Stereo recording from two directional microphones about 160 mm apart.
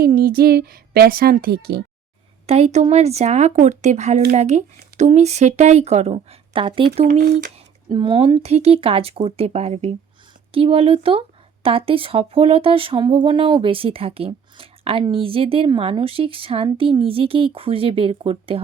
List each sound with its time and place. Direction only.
0.0 s a woman's voice: 65° right (ahead or behind)
2.5 s speech: 40° right (ahead or behind)